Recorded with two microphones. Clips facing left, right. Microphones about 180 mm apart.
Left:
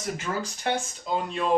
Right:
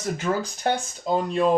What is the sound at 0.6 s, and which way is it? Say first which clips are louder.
Speech: right 4 dB; 40° right (ahead or behind).